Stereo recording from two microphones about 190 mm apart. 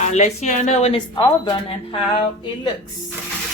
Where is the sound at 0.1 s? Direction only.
40° left (ahead or behind); by 2.2 s 25° left (ahead or behind).